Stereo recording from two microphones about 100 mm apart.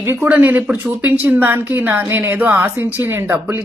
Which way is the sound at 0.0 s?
20° right (ahead or behind).